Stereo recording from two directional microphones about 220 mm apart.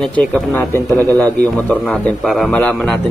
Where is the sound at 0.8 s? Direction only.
15° right (ahead or behind).